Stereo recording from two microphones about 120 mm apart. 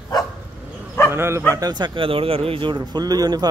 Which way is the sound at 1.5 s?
35° right (ahead or behind).